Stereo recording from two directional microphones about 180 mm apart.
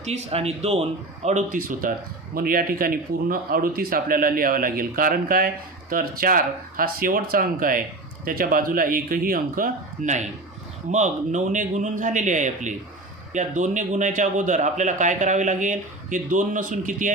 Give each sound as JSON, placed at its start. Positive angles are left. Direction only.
{"t": 0.0, "sound": "a man's voice", "side_deg": -35}